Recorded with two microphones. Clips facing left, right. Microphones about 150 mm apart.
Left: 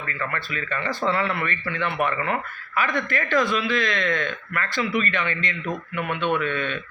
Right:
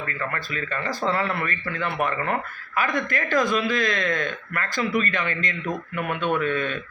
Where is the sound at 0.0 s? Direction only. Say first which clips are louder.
Even; 40° right (ahead or behind).